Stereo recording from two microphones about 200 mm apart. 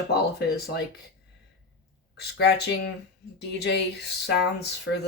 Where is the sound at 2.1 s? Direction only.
55° left (ahead or behind).